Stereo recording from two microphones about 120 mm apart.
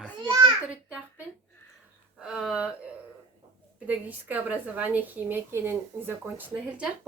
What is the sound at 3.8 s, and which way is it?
A woman's voice, 15° right (ahead or behind).